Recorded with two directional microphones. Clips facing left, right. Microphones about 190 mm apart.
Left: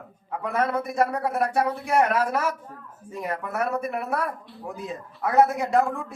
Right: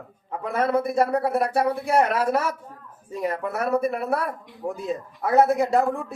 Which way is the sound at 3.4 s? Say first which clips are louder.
Right 4 dB; 35° right (ahead or behind).